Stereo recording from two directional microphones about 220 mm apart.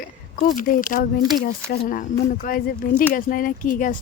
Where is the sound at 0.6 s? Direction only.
40° left (ahead or behind).